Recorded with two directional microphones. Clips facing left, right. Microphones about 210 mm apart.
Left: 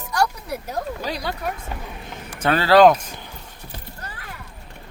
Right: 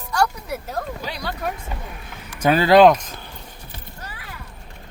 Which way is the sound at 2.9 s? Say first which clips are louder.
Right 1 dB; 10° left (ahead or behind).